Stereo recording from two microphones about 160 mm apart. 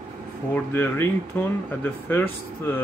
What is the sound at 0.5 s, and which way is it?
Speech, 15° left (ahead or behind).